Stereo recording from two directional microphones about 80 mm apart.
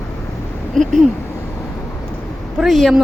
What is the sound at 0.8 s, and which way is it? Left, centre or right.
Speech, centre.